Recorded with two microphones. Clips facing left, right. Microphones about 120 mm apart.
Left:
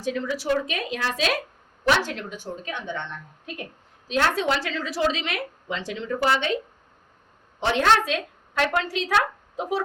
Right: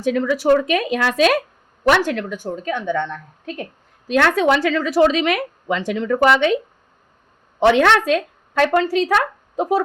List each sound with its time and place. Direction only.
0.0 s a woman's voice: 65° right (ahead or behind)
7.6 s a woman's voice: 65° right (ahead or behind)
8.0 s a woman's voice: 45° right (ahead or behind)